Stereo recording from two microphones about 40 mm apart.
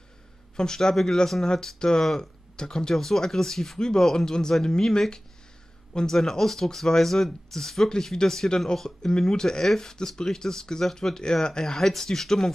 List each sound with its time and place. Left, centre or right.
0.6 s speech: centre
2.5 s speech: centre